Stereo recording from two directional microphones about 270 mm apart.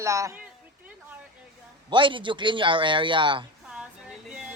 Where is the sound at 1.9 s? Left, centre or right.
Centre.